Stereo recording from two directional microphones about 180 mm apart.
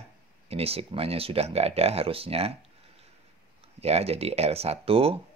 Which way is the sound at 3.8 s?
35° right (ahead or behind).